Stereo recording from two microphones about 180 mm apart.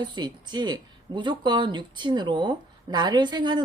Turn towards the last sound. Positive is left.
turn(degrees=-25)  # may be behind; listen again after turning